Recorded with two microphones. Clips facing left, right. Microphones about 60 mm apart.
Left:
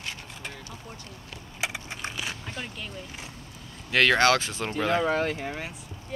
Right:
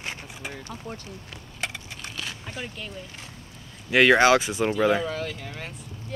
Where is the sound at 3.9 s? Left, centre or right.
Centre.